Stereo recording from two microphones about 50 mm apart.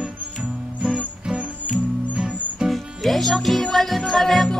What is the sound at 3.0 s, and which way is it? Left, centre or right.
Music, centre.